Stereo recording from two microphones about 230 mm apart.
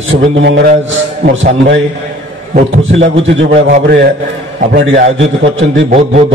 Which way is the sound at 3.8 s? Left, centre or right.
Right.